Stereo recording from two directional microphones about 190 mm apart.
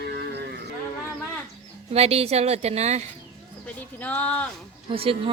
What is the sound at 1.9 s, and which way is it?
A woman's voice, 30° right (ahead or behind).